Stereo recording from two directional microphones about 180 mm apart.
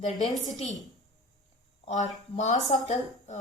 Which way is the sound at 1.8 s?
40° left (ahead or behind).